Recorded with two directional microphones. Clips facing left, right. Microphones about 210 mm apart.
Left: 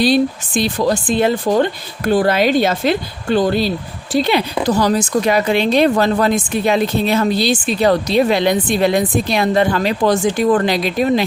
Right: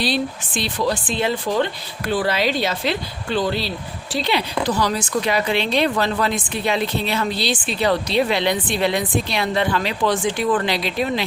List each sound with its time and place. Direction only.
0.0 s speech: 45° left (ahead or behind)